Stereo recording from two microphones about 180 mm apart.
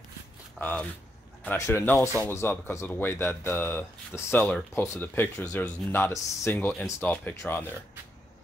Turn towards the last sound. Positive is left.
turn(degrees=10)  # may be behind; listen again after turning